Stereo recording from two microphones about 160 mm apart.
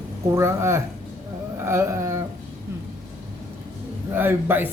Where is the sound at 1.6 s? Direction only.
15° right (ahead or behind).